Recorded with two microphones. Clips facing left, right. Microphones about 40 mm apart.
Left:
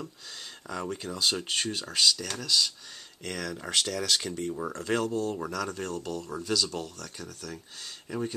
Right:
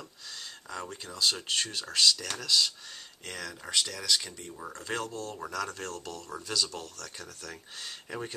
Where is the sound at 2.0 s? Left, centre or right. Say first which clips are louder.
Even; centre.